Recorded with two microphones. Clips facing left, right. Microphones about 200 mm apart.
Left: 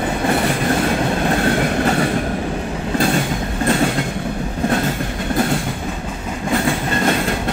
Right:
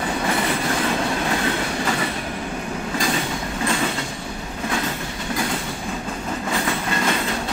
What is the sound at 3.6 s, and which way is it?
Train, 55° left (ahead or behind).